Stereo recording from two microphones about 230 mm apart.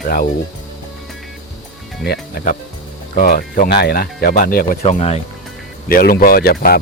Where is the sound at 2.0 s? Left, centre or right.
Left.